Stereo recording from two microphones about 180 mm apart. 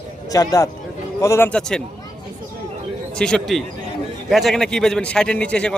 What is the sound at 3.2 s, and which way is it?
Speech, 5° left (ahead or behind).